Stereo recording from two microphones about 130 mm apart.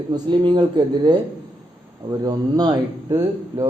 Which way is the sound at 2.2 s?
30° right (ahead or behind).